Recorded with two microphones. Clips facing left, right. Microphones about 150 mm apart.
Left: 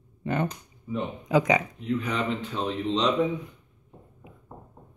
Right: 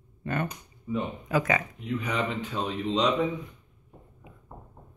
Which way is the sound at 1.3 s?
15° left (ahead or behind).